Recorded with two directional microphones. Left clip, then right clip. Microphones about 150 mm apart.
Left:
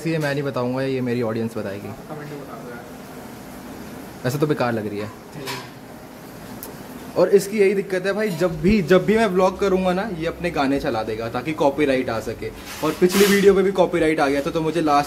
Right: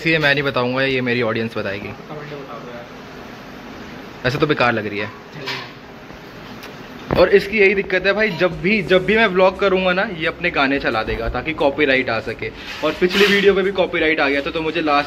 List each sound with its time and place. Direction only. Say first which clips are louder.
0.0 s speech: right 7 dB; 20° left (ahead or behind)
4.2 s speech: right 5 dB; 25° left (ahead or behind)
7.3 s speech: right 3 dB; 30° left (ahead or behind)
8.6 s a man's voice: even; 75° left (ahead or behind)
9.0 s a man's voice: right 4 dB; 40° left (ahead or behind)